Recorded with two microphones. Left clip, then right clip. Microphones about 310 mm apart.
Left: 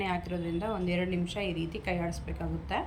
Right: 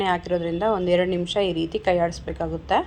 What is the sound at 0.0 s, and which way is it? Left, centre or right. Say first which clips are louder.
A woman's voice: right 11 dB; right.